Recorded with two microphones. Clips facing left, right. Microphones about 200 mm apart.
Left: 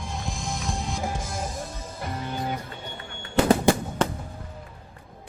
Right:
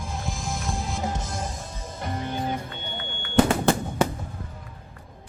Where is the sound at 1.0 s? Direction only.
10° left (ahead or behind).